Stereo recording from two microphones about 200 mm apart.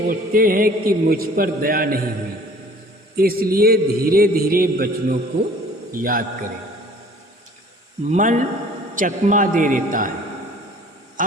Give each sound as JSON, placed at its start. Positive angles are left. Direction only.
{"t": 0.1, "sound": "a man's voice", "side_deg": -45}
{"t": 3.2, "sound": "a man's voice", "side_deg": -45}
{"t": 8.1, "sound": "a man's voice", "side_deg": -40}
{"t": 11.2, "sound": "a sound", "side_deg": -40}